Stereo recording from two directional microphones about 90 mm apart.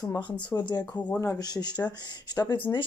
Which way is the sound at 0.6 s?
50° left (ahead or behind).